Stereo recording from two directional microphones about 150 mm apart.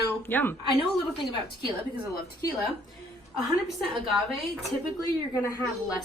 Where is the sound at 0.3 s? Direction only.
15° left (ahead or behind).